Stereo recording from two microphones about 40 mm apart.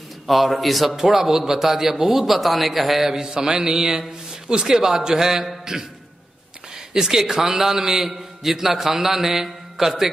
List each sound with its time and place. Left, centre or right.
0.3 s a man's voice: centre
3.3 s mantra: centre
4.5 s a man's voice: centre
6.9 s a man's voice: centre